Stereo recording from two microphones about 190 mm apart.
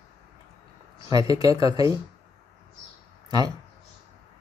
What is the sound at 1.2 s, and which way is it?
Speech, 20° right (ahead or behind).